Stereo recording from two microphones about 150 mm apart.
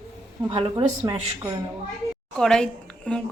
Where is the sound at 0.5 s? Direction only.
50° right (ahead or behind).